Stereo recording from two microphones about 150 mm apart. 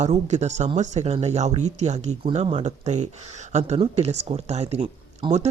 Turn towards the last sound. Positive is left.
turn(degrees=-30)  # may be behind; listen again after turning